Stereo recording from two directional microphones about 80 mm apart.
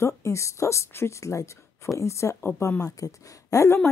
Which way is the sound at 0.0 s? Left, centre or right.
Left.